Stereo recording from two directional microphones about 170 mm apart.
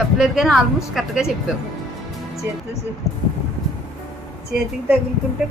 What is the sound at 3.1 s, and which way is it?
Speech, 20° left (ahead or behind).